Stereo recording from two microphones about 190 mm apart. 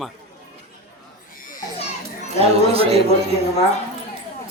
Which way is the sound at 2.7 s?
30° right (ahead or behind).